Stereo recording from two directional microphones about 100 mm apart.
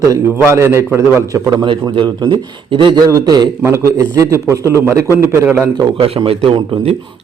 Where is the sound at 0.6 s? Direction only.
25° right (ahead or behind).